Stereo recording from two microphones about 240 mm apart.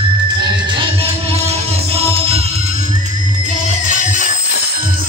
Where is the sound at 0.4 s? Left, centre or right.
Centre.